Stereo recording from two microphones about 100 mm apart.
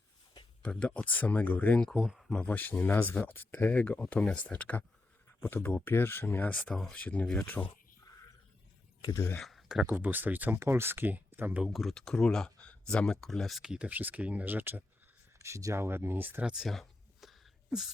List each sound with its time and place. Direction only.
0.6 s speech: 10° left (ahead or behind)
1.9 s speech: centre (ahead or behind)
2.3 s speech: 15° left (ahead or behind)
6.7 s speech: 5° left (ahead or behind)
7.0 s speech: 15° left (ahead or behind)
9.1 s speech: 20° left (ahead or behind)
9.4 s speech: centre (ahead or behind); by 11.6 s 20° right (ahead or behind)
11.6 s speech: centre (ahead or behind); by 14.8 s 20° right (ahead or behind)
15.4 s speech: 30° right (ahead or behind); by 17.9 s 5° right (ahead or behind)